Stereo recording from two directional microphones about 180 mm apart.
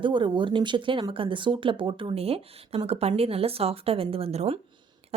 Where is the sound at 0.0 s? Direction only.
25° right (ahead or behind).